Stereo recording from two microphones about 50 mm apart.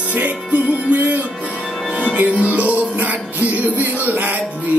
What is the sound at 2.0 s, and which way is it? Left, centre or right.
Music, right.